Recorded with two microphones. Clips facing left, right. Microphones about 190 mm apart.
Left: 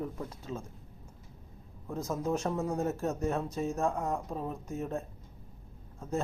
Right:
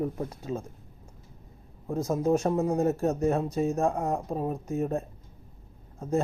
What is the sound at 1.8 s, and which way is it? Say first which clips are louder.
Speech: right 7 dB; 35° right (ahead or behind).